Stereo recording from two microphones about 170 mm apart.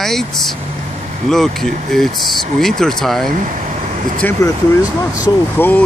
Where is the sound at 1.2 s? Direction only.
Centre (ahead or behind).